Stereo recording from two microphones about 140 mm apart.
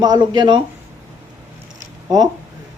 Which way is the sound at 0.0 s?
30° right (ahead or behind).